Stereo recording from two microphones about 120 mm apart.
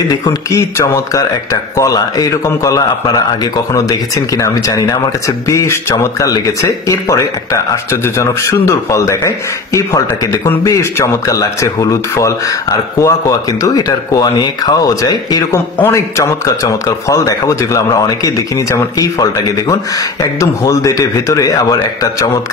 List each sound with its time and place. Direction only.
0.2 s speech: 30° left (ahead or behind)